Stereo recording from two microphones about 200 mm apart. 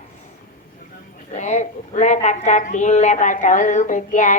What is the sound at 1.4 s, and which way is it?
A woman's voice, 35° left (ahead or behind).